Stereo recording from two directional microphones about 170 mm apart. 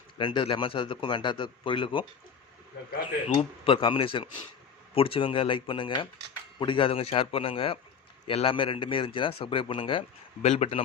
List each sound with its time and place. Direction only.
0.2 s speech: 30° left (ahead or behind)
3.2 s a man's voice: 35° left (ahead or behind)